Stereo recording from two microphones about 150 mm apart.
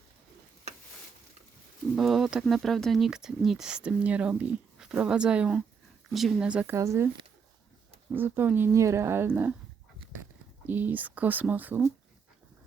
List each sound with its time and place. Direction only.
2.0 s speech: centre (ahead or behind)
6.7 s speech: 20° right (ahead or behind)
8.1 s speech: 15° right (ahead or behind)
10.7 s speech: 10° right (ahead or behind)